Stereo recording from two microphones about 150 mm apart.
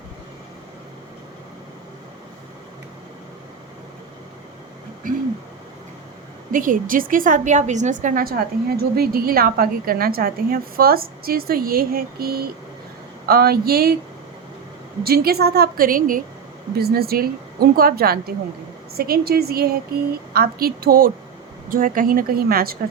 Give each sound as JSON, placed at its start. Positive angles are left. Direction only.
{"t": 6.5, "sound": "a woman's voice", "side_deg": -65}
{"t": 15.0, "sound": "speech", "side_deg": -90}
{"t": 16.7, "sound": "speech", "side_deg": -90}
{"t": 21.7, "sound": "a woman's voice", "side_deg": -65}